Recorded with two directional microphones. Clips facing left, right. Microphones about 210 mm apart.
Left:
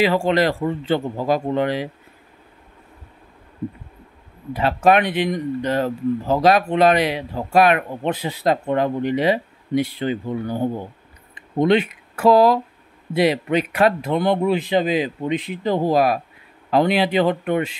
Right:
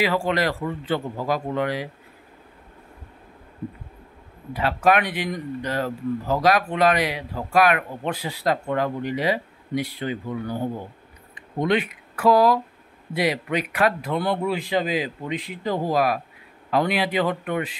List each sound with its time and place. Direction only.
0.0 s speech: 25° left (ahead or behind)
4.6 s speech: 25° left (ahead or behind)
11.6 s speech: 25° left (ahead or behind)